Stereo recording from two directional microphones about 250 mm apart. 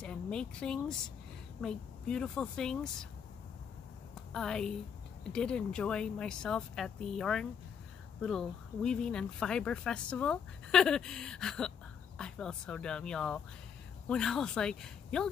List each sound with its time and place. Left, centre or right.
0.0 s speech: centre
4.1 s a sound: centre
5.3 s speech: centre